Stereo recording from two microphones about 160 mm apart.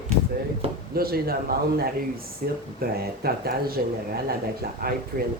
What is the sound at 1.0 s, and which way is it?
Speech, 70° right (ahead or behind).